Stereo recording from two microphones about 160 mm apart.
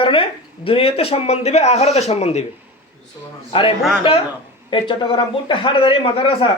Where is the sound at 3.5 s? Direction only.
35° left (ahead or behind).